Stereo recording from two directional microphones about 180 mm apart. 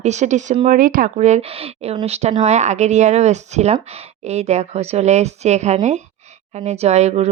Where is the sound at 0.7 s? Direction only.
50° right (ahead or behind).